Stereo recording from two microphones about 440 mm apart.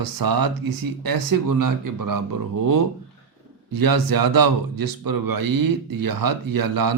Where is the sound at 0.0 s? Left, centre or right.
Right.